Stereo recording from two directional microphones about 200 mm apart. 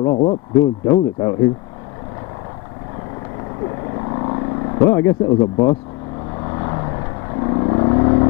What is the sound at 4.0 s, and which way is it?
Vehicle, 25° left (ahead or behind).